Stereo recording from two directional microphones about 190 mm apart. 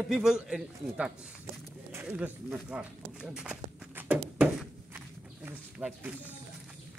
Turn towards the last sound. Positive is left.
turn(degrees=-5)  # may be behind; listen again after turning